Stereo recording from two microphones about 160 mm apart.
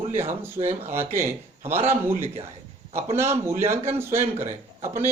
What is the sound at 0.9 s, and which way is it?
A man's voice, 15° right (ahead or behind).